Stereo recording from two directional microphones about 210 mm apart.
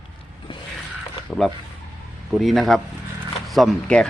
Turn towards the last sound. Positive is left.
turn(degrees=5)  # may be behind; listen again after turning